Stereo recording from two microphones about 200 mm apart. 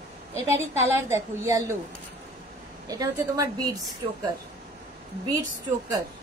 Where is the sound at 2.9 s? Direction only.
20° right (ahead or behind).